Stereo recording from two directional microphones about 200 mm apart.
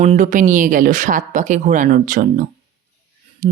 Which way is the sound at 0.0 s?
35° right (ahead or behind).